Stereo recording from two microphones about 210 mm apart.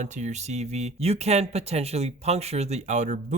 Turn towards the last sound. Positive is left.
turn(degrees=-35)  # may be behind; listen again after turning